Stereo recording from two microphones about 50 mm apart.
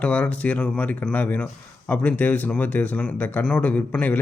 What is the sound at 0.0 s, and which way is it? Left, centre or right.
Speech, left.